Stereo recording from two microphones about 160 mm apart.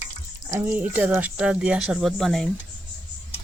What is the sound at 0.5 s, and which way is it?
Speech, 10° right (ahead or behind).